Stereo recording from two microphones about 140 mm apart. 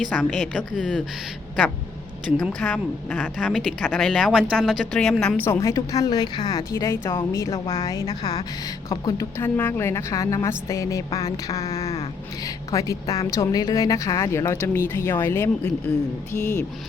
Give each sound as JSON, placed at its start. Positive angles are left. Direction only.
{"t": 0.0, "sound": "a woman's voice", "side_deg": 5}
{"t": 2.2, "sound": "a woman's voice", "side_deg": 5}
{"t": 5.4, "sound": "speech", "side_deg": 20}